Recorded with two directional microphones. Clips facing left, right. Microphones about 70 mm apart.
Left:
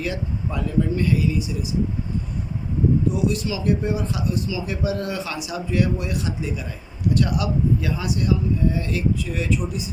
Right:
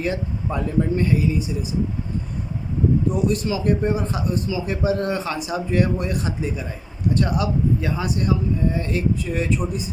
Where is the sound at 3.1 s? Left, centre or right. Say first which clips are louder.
Right 2 dB; right.